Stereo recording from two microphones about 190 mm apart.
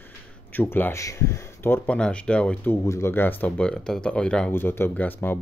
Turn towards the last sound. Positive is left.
turn(degrees=10)  # may be behind; listen again after turning